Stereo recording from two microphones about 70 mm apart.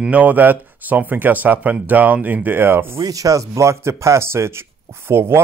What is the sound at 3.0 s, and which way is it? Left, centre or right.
Speech, right.